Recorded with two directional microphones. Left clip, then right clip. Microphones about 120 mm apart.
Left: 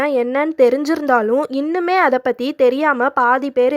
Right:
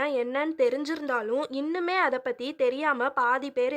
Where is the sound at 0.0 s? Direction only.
45° left (ahead or behind).